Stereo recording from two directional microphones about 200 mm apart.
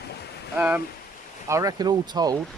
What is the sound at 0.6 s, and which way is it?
Speech, 10° right (ahead or behind).